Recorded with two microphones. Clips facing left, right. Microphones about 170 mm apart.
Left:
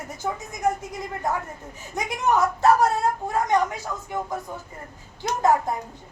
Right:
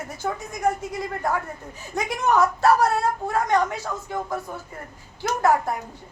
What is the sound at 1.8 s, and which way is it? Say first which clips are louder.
Speech: right 2 dB; 20° left (ahead or behind).